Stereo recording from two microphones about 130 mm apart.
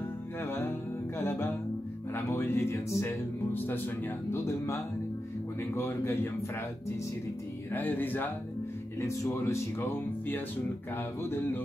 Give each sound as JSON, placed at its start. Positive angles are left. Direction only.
{"t": 0.4, "sound": "music", "side_deg": 20}
{"t": 2.1, "sound": "speech", "side_deg": 20}
{"t": 7.7, "sound": "speech", "side_deg": 15}